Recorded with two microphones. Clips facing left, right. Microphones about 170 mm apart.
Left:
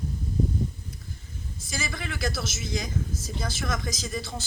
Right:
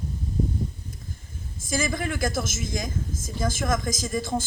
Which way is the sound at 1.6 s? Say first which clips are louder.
Right 8 dB; 50° right (ahead or behind).